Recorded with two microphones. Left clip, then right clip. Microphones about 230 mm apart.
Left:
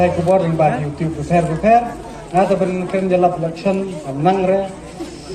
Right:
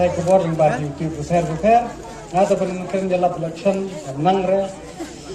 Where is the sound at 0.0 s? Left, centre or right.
Right.